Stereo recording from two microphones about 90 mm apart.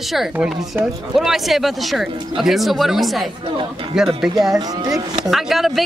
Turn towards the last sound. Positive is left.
turn(degrees=0)  # may be behind; listen again after turning